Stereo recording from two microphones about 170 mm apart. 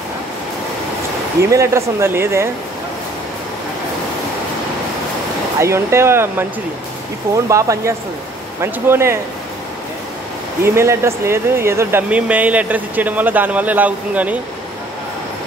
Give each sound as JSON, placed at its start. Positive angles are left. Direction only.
{"t": 1.5, "sound": "speech", "side_deg": -15}
{"t": 5.6, "sound": "speech", "side_deg": -15}
{"t": 10.6, "sound": "speech", "side_deg": -15}